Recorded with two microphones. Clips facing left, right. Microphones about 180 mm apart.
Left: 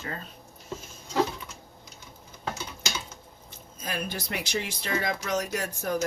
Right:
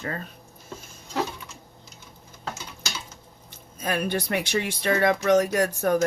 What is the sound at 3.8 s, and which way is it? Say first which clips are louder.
Speech: right 7 dB; 60° right (ahead or behind).